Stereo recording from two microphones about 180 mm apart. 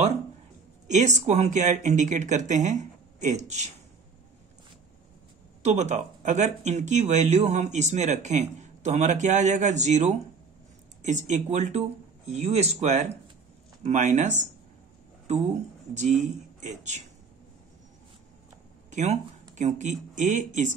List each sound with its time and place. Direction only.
0.8 s speech: 40° right (ahead or behind)
5.6 s speech: 40° right (ahead or behind)
15.9 s speech: 40° right (ahead or behind)
18.9 s a sound: 40° right (ahead or behind)
19.5 s speech: 40° right (ahead or behind)